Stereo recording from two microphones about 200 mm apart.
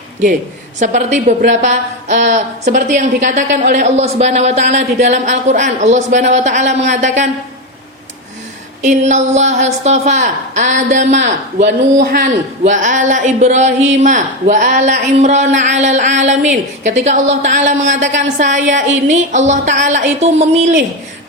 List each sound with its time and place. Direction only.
0.8 s a man's voice: 35° right (ahead or behind)
8.8 s a man's voice: 35° right (ahead or behind)
11.6 s a man's voice: 50° right (ahead or behind); by 20.5 s 35° right (ahead or behind)